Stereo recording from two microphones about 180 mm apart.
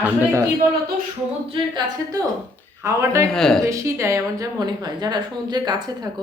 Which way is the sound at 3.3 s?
5° left (ahead or behind).